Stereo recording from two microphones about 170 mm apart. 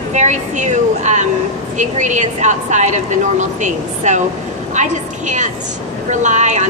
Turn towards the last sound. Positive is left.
turn(degrees=-45)  # may be behind; listen again after turning